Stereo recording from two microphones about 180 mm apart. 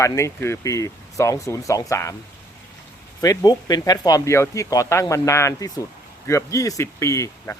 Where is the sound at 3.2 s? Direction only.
20° left (ahead or behind).